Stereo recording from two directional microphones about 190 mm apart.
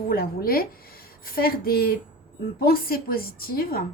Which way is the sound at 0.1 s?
50° left (ahead or behind).